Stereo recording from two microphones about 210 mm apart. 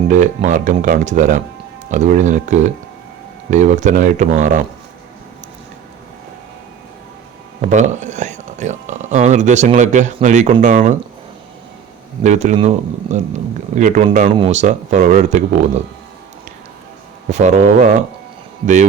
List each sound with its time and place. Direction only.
0.1 s speech: 35° right (ahead or behind)
7.6 s speech: 35° right (ahead or behind)
12.2 s speech: 35° right (ahead or behind)
14.3 s speech: 25° right (ahead or behind)
17.3 s speech: 35° right (ahead or behind)